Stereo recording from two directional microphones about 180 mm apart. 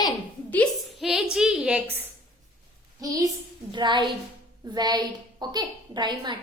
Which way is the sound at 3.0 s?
20° right (ahead or behind).